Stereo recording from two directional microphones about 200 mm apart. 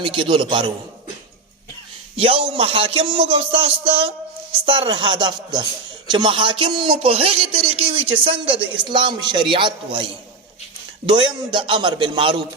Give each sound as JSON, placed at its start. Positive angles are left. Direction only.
{"t": 0.0, "sound": "speech", "side_deg": -25}
{"t": 2.1, "sound": "speech", "side_deg": -25}